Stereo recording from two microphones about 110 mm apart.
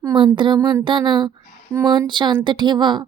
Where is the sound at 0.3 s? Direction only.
45° right (ahead or behind).